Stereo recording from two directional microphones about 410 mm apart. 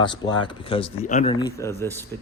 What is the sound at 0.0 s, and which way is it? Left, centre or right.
Speech, centre.